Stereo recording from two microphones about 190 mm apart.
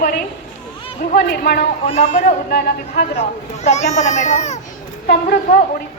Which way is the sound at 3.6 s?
35° left (ahead or behind).